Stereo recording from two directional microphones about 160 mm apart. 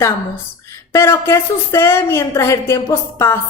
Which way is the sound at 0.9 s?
15° left (ahead or behind).